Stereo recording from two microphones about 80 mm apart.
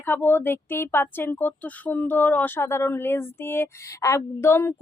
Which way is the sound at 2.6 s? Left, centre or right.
Left.